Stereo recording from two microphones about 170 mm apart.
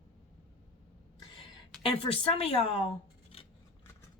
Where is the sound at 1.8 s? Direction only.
35° left (ahead or behind).